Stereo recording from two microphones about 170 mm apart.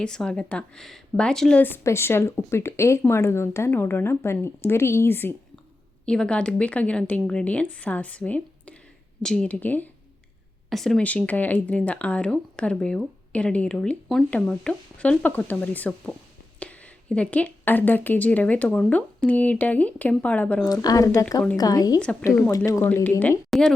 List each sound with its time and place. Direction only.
0.0 s a woman's voice: 5° left (ahead or behind)
20.8 s a woman's voice: 20° left (ahead or behind)
23.5 s a sound: 5° left (ahead or behind)